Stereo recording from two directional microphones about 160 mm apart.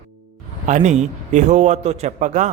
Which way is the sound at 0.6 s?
50° right (ahead or behind).